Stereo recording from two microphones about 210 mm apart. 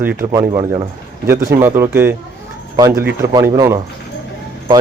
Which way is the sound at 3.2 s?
15° right (ahead or behind).